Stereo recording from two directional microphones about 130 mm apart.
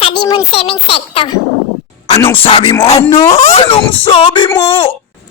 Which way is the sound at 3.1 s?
25° left (ahead or behind).